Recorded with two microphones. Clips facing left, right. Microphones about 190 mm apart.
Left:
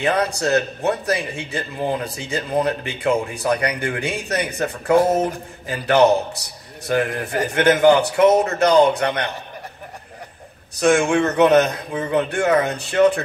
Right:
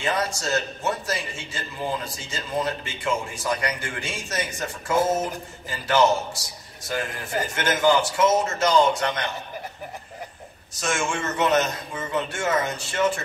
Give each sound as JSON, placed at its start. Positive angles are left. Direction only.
{"t": 0.0, "sound": "a man's voice", "side_deg": 60}
{"t": 10.8, "sound": "a man's voice", "side_deg": 60}